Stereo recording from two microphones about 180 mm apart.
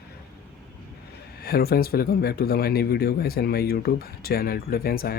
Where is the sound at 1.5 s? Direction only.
60° left (ahead or behind).